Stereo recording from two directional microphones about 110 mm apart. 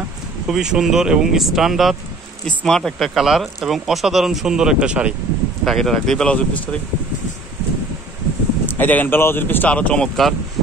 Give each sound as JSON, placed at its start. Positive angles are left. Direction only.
{"t": 0.5, "sound": "speech", "side_deg": -5}
{"t": 5.7, "sound": "speech", "side_deg": 5}
{"t": 8.6, "sound": "speech", "side_deg": 15}